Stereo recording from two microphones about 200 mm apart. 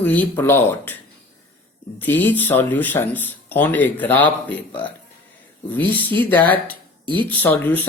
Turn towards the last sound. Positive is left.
turn(degrees=10)  # may be behind; listen again after turning